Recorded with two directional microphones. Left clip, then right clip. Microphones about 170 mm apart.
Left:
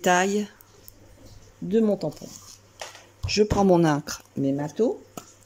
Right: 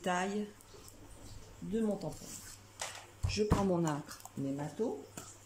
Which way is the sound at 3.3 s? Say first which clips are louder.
Left 13 dB; 60° left (ahead or behind).